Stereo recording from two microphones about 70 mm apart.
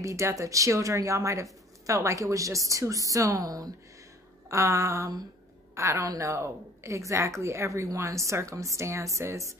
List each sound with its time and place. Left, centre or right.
0.0 s speech: right
4.5 s a woman's voice: right